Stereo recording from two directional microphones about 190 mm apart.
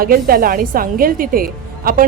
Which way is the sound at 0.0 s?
50° right (ahead or behind).